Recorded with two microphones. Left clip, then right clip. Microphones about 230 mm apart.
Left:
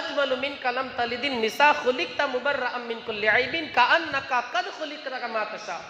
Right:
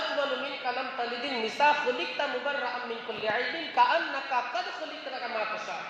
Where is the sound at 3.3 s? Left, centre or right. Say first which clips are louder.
Left 2 dB; left.